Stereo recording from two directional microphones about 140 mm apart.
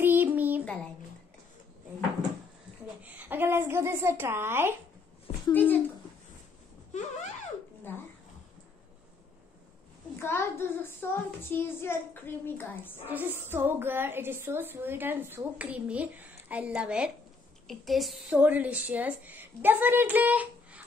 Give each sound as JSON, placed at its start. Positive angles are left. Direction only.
{"t": 0.0, "sound": "child singing", "side_deg": -15}
{"t": 3.0, "sound": "a woman's voice", "side_deg": -10}
{"t": 5.5, "sound": "a child's voice", "side_deg": 15}
{"t": 7.9, "sound": "a child's voice", "side_deg": 15}
{"t": 10.1, "sound": "a child's voice", "side_deg": 15}
{"t": 13.1, "sound": "a woman's voice", "side_deg": -15}